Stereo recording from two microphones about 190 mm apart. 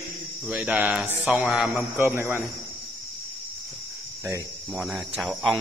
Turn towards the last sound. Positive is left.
turn(degrees=0)  # may be behind; listen again after turning